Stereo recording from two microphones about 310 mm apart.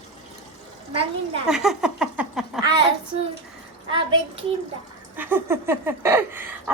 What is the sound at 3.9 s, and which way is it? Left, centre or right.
A woman's voice, centre.